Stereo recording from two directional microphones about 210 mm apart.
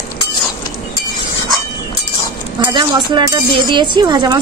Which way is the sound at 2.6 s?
20° right (ahead or behind).